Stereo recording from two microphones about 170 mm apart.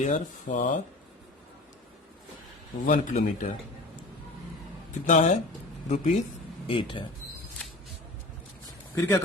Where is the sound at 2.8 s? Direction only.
50° left (ahead or behind).